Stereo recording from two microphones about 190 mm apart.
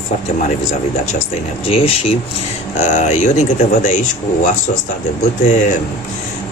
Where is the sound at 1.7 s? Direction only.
30° left (ahead or behind).